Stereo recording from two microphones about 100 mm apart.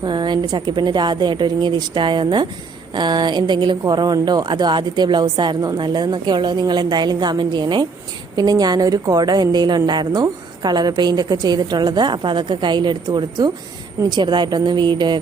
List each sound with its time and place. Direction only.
0.0 s a woman's voice: 50° right (ahead or behind)